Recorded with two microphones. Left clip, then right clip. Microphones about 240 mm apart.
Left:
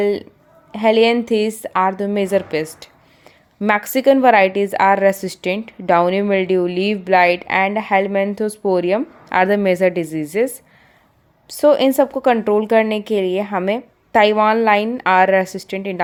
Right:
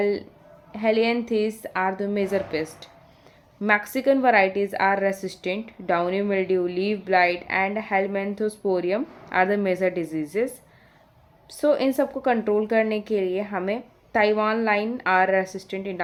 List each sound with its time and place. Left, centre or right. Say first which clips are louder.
0.0 s a woman's voice: left 6 dB; left
11.5 s a woman's voice: left 8 dB; left